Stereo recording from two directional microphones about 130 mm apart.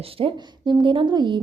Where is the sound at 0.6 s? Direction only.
40° right (ahead or behind).